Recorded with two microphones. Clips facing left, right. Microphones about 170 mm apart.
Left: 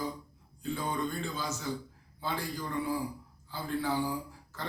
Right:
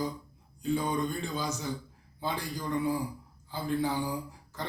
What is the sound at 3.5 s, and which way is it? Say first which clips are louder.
Speech: right 3 dB; 15° right (ahead or behind).